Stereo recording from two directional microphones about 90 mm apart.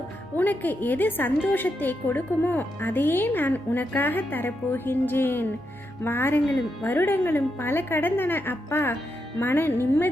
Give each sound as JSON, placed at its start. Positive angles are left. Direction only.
{"t": 0.3, "sound": "a woman's voice", "side_deg": 20}